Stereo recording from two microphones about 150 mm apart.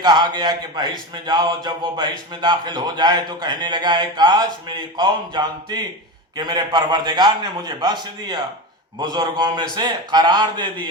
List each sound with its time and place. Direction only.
0.0 s speech: 30° right (ahead or behind)